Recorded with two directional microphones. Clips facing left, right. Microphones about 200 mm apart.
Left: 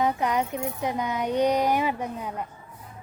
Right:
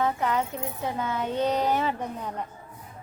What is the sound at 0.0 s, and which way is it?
A woman's voice, 15° left (ahead or behind).